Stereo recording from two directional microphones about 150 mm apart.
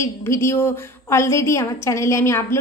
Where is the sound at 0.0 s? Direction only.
20° left (ahead or behind).